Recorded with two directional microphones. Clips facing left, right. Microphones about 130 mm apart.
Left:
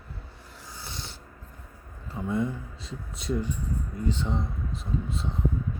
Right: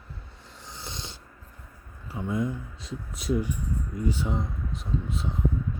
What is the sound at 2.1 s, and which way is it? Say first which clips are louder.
Speech: even; centre (ahead or behind).